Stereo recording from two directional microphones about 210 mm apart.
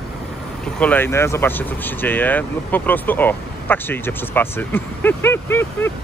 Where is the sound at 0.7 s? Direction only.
10° left (ahead or behind).